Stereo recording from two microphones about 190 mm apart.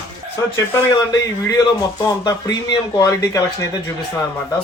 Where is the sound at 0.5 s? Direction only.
15° left (ahead or behind).